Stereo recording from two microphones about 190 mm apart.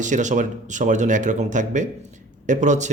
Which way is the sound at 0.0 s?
40° right (ahead or behind).